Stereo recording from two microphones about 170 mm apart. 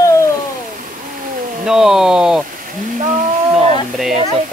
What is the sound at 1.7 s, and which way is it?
Speech, 5° right (ahead or behind).